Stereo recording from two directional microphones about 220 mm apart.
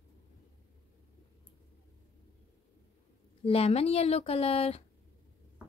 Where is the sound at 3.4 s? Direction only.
25° left (ahead or behind).